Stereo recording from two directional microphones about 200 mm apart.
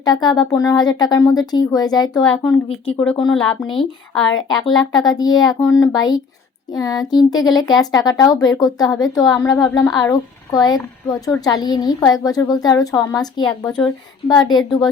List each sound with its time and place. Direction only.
0.0 s speech: 20° left (ahead or behind)
13.7 s a woman's voice: 5° left (ahead or behind)
14.3 s speech: 20° left (ahead or behind)